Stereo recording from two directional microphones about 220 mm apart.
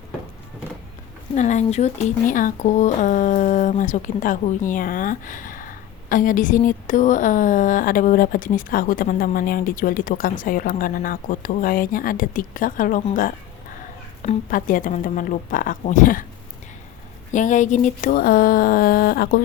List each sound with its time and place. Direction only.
1.4 s speech: 30° left (ahead or behind)
17.3 s speech: 35° left (ahead or behind)